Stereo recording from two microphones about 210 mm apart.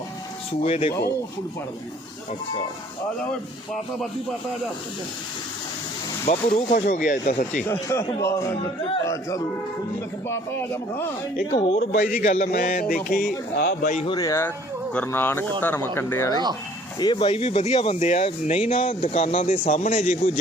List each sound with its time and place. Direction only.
0.6 s speech: 25° left (ahead or behind)
6.2 s speech: 35° left (ahead or behind)
7.7 s speech: 15° left (ahead or behind)
10.2 s speech: 10° left (ahead or behind)
11.8 s speech: 40° left (ahead or behind)
13.8 s speech: 35° left (ahead or behind)
14.1 s speech: 15° left (ahead or behind); by 20.4 s 35° left (ahead or behind)